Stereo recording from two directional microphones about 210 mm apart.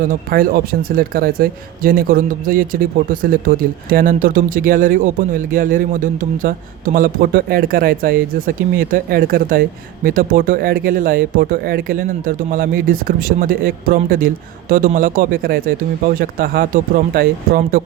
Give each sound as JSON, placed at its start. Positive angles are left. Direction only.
{"t": 0.1, "sound": "speech", "side_deg": -45}